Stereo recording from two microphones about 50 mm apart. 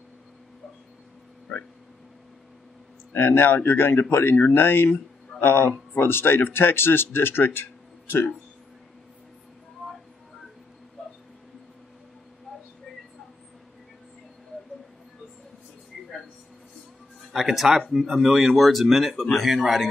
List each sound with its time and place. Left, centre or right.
3.1 s speech: left
11.0 s dog: centre
17.3 s speech: centre